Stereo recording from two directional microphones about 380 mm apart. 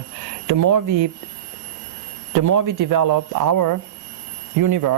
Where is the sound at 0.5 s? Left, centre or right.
Right.